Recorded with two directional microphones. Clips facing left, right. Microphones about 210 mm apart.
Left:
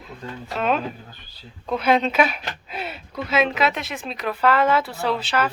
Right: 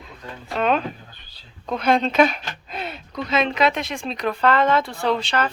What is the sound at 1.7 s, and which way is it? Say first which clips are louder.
Speech: even; 5° left (ahead or behind).